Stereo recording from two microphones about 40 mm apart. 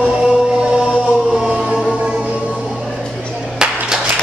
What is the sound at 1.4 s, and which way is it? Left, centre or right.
Choir, centre.